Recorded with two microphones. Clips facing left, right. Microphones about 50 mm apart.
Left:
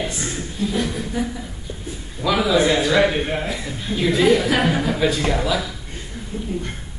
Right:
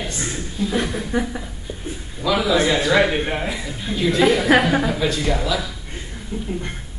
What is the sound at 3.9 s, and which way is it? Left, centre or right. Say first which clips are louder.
Speech: even; centre.